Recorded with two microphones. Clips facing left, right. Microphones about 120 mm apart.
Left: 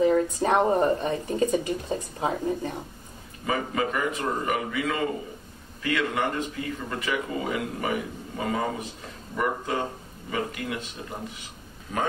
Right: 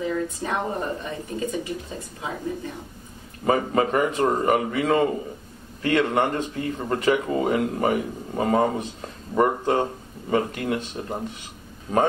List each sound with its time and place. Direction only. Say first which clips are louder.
0.0 s speech: left 5 dB; 40° left (ahead or behind)
3.4 s speech: right 6 dB; 40° right (ahead or behind)